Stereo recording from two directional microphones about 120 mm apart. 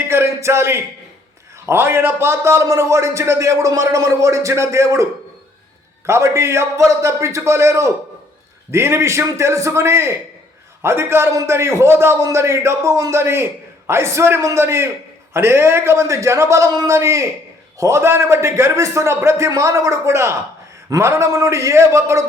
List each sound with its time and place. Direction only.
0.1 s a sound: 25° right (ahead or behind)
1.6 s a man's voice: 20° right (ahead or behind)
6.1 s a man's voice: 20° right (ahead or behind)